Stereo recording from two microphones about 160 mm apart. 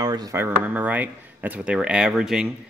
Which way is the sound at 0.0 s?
25° right (ahead or behind).